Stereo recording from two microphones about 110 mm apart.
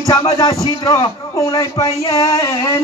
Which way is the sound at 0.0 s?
30° left (ahead or behind).